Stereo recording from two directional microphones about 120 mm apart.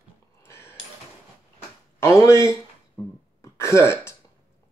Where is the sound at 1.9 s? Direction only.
25° left (ahead or behind).